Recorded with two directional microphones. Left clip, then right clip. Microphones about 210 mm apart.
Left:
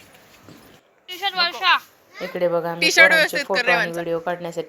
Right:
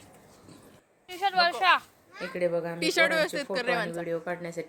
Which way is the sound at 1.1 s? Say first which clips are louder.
Left 2 dB; 45° right (ahead or behind).